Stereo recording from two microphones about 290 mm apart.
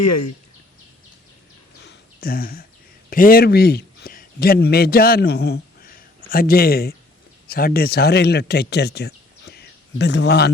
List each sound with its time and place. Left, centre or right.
0.0 s speech: left
1.8 s a sound: left
3.1 s a man's voice: left